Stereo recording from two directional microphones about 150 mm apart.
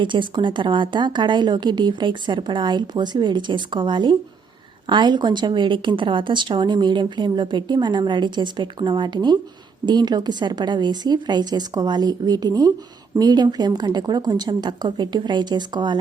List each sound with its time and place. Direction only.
0.0 s a woman's voice: 35° right (ahead or behind)